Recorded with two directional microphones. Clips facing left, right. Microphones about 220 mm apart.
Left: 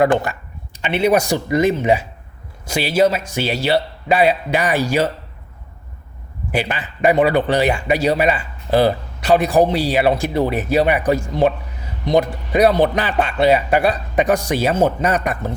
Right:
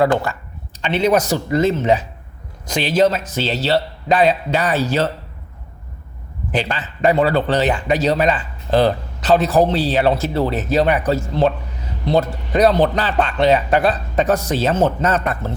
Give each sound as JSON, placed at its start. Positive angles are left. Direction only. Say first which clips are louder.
{"t": 0.0, "sound": "speech", "louder": "left 1 dB", "side_deg": 15}
{"t": 6.5, "sound": "speech", "louder": "even", "side_deg": 10}